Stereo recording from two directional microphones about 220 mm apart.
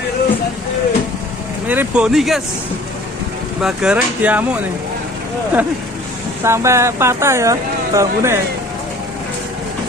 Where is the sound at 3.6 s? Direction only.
5° right (ahead or behind).